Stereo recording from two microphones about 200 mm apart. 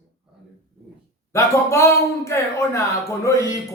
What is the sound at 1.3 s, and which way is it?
Speech, 15° left (ahead or behind).